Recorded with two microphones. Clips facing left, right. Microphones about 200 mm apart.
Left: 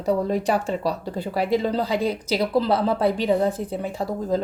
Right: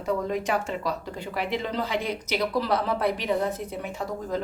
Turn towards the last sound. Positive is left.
turn(degrees=35)  # may be behind; listen again after turning